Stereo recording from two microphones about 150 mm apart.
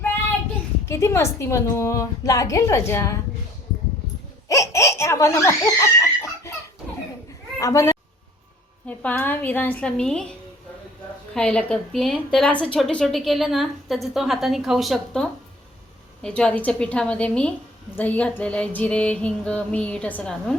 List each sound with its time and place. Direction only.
0.9 s a woman's voice: 20° left (ahead or behind)
4.4 s a woman's voice: 20° left (ahead or behind)
7.6 s a woman's voice: 20° left (ahead or behind)
8.9 s a sound: 10° left (ahead or behind)
11.3 s a woman's voice: 5° left (ahead or behind)
16.2 s a sound: 5° left (ahead or behind)